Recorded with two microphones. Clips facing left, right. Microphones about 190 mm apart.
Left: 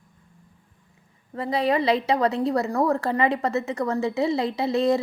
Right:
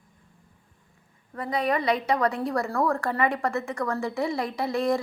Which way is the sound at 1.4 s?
30° left (ahead or behind).